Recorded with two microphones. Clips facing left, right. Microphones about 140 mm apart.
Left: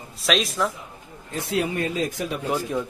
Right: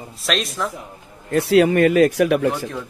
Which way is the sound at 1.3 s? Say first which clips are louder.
Right 11 dB; 70° right (ahead or behind).